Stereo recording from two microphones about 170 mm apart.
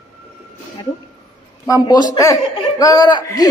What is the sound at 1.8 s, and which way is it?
A man's voice, 25° left (ahead or behind).